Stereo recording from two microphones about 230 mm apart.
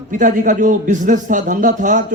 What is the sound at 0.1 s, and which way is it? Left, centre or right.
A man's voice, right.